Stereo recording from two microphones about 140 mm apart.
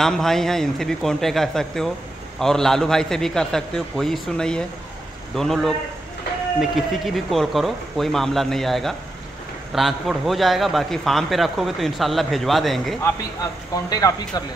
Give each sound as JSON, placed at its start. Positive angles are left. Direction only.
{"t": 0.0, "sound": "a man's voice", "side_deg": 5}
{"t": 13.0, "sound": "speech", "side_deg": 25}